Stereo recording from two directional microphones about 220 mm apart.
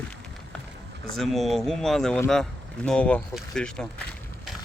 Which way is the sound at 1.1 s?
Centre (ahead or behind).